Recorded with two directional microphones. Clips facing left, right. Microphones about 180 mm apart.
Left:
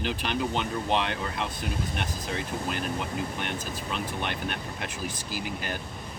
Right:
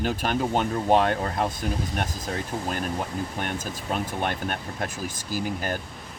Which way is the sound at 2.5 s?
30° right (ahead or behind).